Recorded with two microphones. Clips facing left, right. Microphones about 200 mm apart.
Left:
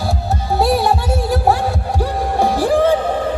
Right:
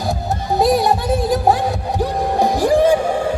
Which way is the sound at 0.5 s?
15° right (ahead or behind).